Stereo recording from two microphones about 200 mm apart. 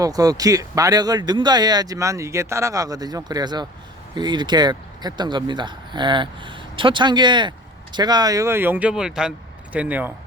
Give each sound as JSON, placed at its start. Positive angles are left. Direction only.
{"t": 0.0, "sound": "speech", "side_deg": -15}